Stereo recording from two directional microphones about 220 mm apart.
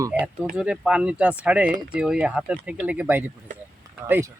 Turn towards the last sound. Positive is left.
turn(degrees=-10)  # may be behind; listen again after turning